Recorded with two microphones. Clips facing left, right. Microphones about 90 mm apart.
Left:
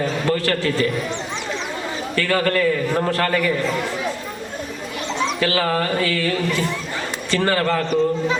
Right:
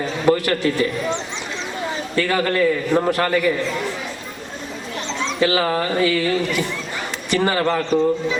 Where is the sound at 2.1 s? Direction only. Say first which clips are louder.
Even; 20° right (ahead or behind).